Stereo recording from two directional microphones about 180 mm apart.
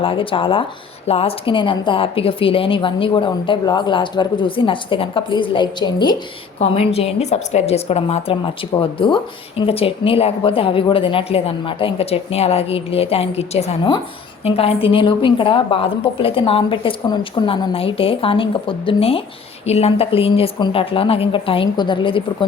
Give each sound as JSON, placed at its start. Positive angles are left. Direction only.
{"t": 0.0, "sound": "a woman's voice", "side_deg": 30}
{"t": 6.6, "sound": "a woman's voice", "side_deg": 35}